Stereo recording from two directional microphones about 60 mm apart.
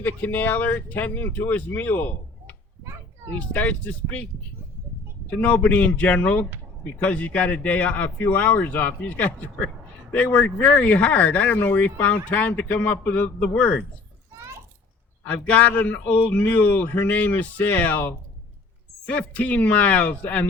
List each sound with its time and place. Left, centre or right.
0.0 s speech: left
5.4 s speech: left
15.2 s speech: left